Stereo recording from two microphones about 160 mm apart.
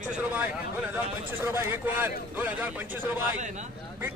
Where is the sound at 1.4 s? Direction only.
15° right (ahead or behind).